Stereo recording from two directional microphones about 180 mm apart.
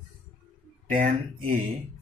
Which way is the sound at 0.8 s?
50° right (ahead or behind).